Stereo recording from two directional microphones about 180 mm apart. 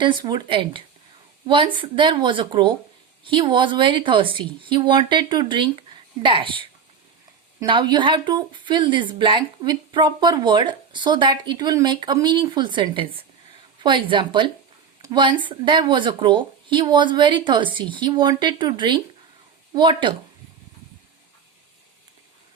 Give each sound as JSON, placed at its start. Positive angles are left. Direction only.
{"t": 0.0, "sound": "speech", "side_deg": -25}